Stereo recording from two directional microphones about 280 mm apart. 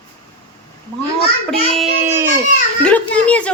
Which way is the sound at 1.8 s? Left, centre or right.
Centre.